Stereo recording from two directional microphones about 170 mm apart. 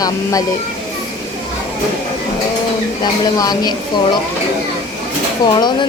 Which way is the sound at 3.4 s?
25° left (ahead or behind).